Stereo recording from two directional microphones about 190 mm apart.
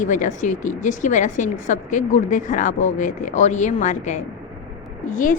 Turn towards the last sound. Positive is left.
turn(degrees=45)  # may be behind; listen again after turning